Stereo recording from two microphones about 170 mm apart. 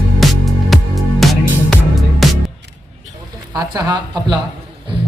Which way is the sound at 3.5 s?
25° right (ahead or behind).